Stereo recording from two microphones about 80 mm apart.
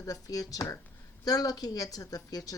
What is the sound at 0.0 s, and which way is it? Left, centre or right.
A woman's voice, left.